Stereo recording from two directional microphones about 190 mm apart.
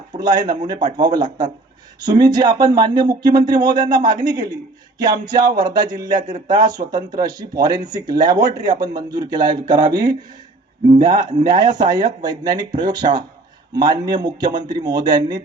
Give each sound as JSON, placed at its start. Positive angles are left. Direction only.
{"t": 0.1, "sound": "speech", "side_deg": -20}